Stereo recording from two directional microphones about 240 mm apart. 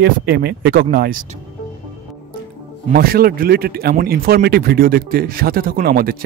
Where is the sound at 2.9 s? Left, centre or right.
Right.